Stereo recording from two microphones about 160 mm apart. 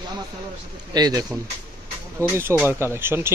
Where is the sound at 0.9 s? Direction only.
25° right (ahead or behind).